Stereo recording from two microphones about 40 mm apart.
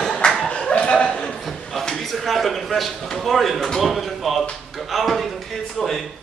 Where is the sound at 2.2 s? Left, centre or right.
Centre.